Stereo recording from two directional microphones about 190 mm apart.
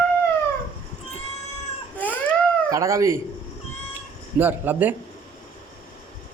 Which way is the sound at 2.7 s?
15° right (ahead or behind).